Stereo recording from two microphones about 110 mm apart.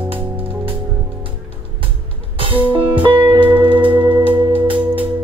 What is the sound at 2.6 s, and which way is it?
Music, 15° right (ahead or behind).